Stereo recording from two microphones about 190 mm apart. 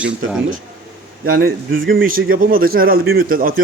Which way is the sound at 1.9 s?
50° right (ahead or behind).